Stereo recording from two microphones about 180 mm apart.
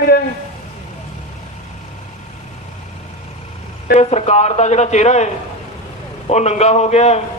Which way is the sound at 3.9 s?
35° left (ahead or behind).